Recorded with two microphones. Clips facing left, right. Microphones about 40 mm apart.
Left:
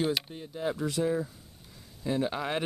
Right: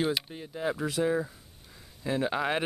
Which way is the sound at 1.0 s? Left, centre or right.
Right.